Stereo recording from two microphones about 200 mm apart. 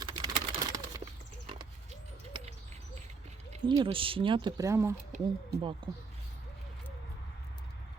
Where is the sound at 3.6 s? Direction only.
25° right (ahead or behind).